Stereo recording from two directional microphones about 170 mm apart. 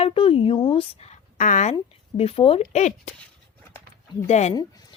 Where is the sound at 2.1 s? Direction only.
35° left (ahead or behind).